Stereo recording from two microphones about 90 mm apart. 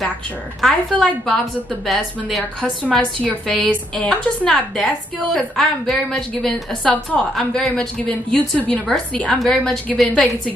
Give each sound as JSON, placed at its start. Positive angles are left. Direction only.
{"t": 0.6, "sound": "a woman's voice", "side_deg": 5}
{"t": 2.6, "sound": "a woman's voice", "side_deg": 15}
{"t": 5.3, "sound": "a woman's voice", "side_deg": 5}